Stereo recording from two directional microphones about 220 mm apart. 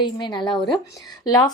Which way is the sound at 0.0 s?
20° left (ahead or behind).